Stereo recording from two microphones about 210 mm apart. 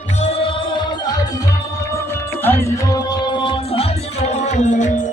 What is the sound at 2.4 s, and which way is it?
Music, 10° left (ahead or behind).